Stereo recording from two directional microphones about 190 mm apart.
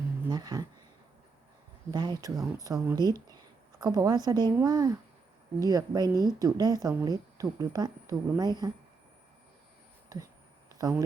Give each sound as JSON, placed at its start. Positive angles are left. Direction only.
{"t": 0.3, "sound": "speech", "side_deg": -20}
{"t": 1.9, "sound": "speech", "side_deg": -20}
{"t": 10.1, "sound": "speech", "side_deg": -20}